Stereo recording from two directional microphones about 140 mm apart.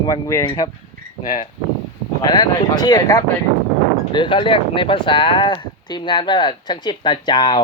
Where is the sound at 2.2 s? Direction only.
30° left (ahead or behind).